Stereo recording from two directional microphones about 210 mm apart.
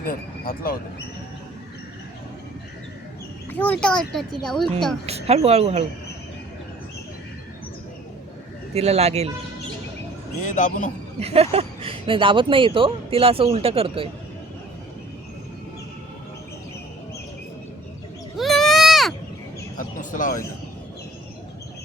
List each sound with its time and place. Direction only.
0.0 s speech: 45° left (ahead or behind)
3.5 s speech: 5° left (ahead or behind)
5.0 s speech: 30° right (ahead or behind)
8.7 s speech: 30° right (ahead or behind)
10.4 s a man's voice: 35° left (ahead or behind)
11.2 s speech: 30° right (ahead or behind)
18.3 s sheep: centre (ahead or behind)
19.7 s a sound: 40° left (ahead or behind)